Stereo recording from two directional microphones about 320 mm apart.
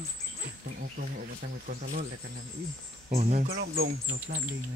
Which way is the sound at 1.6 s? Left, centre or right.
Right.